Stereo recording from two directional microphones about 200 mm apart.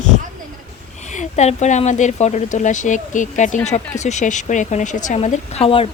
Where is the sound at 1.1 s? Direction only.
35° left (ahead or behind).